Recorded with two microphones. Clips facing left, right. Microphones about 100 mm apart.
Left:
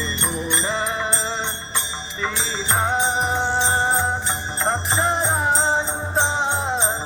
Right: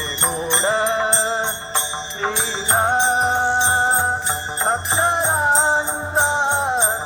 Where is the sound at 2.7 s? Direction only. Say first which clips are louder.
Right 4 dB; 30° right (ahead or behind).